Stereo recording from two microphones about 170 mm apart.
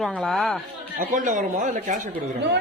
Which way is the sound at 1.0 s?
50° right (ahead or behind).